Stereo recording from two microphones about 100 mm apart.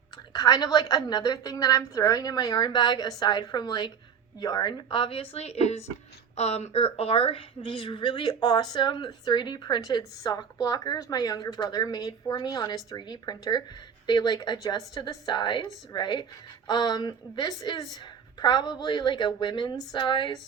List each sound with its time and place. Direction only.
0.3 s a woman's voice: 40° left (ahead or behind)